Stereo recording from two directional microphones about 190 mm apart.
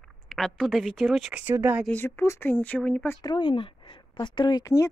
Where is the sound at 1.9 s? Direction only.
10° left (ahead or behind).